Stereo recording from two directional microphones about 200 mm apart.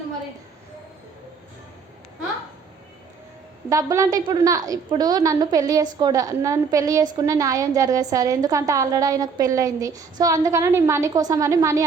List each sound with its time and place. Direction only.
3.7 s a woman's voice: 15° right (ahead or behind)